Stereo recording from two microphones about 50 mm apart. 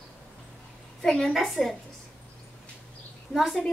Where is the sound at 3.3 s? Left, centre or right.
Centre.